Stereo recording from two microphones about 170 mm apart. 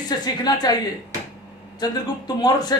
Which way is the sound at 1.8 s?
25° left (ahead or behind).